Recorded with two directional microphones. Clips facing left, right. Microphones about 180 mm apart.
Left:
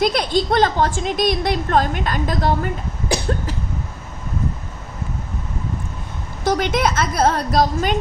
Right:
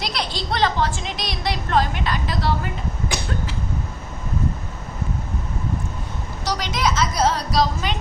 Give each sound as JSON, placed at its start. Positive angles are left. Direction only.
{"t": 0.0, "sound": "a woman's voice", "side_deg": 50}
{"t": 6.4, "sound": "a woman's voice", "side_deg": 55}